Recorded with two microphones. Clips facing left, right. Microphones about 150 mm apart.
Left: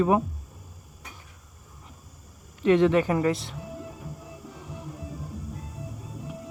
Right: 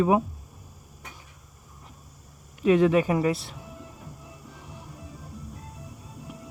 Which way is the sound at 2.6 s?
10° right (ahead or behind).